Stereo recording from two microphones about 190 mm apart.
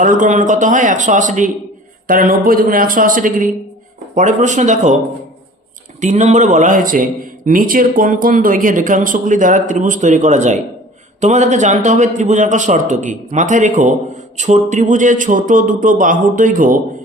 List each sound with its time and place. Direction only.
0.0 s a man's voice: 40° right (ahead or behind)
6.0 s a man's voice: 40° right (ahead or behind)